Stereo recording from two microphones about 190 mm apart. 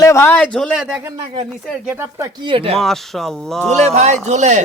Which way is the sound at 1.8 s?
15° right (ahead or behind).